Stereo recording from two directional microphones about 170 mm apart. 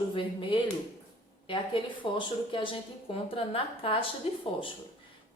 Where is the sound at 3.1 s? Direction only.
35° left (ahead or behind).